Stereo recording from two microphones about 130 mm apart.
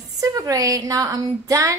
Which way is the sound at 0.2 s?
25° right (ahead or behind).